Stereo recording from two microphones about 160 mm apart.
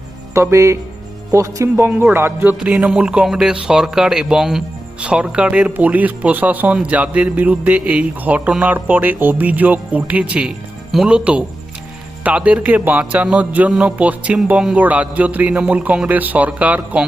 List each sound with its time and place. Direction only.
0.3 s speech: 15° right (ahead or behind)